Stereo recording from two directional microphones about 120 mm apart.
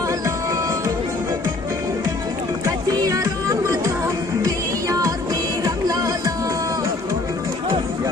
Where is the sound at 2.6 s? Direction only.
25° right (ahead or behind).